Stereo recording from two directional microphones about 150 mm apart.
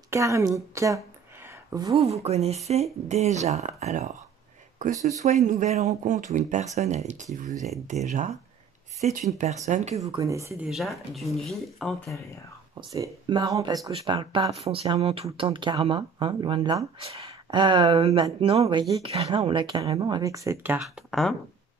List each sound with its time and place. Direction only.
0.1 s speech: 20° right (ahead or behind)
0.7 s a sound: 20° right (ahead or behind)
2.0 s speech: 45° right (ahead or behind)
9.9 s speech: 20° right (ahead or behind)
10.6 s speech: centre (ahead or behind)
12.9 s speech: 25° right (ahead or behind)
19.1 s speech: 40° right (ahead or behind); by 20.8 s 15° right (ahead or behind)
20.8 s speech: centre (ahead or behind)